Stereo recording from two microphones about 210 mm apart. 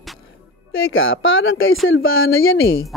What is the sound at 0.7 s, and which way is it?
Speech, 70° left (ahead or behind).